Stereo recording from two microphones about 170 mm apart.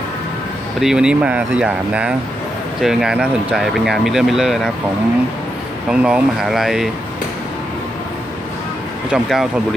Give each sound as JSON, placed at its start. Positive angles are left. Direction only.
{"t": 0.7, "sound": "speech", "side_deg": -5}
{"t": 5.9, "sound": "speech", "side_deg": -5}
{"t": 9.1, "sound": "speech", "side_deg": 0}